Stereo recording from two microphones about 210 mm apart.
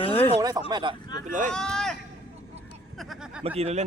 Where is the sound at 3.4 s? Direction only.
30° right (ahead or behind).